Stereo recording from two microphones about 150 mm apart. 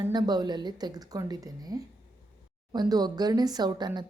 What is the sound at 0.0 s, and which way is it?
A woman's voice, 30° right (ahead or behind).